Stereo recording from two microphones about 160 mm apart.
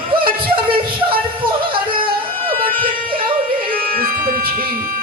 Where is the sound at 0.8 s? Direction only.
30° right (ahead or behind).